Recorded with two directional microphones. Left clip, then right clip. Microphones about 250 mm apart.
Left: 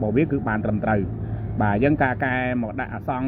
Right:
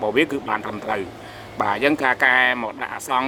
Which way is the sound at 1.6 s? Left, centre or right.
Centre.